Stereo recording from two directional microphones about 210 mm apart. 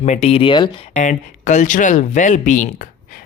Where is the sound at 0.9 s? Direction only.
35° left (ahead or behind).